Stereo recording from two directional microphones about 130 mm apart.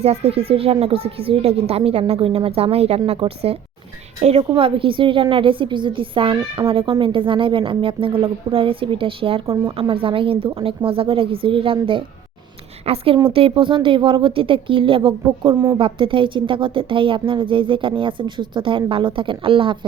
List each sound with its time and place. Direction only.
0.0 s a woman's voice: 55° right (ahead or behind)